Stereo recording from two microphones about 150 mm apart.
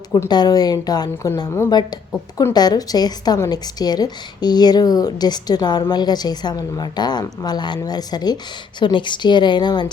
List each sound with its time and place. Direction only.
0.1 s a woman's voice: 25° left (ahead or behind)